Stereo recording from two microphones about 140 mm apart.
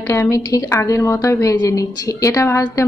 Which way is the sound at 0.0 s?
20° left (ahead or behind).